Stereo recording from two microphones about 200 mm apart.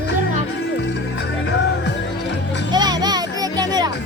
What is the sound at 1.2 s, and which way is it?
Music, 60° left (ahead or behind).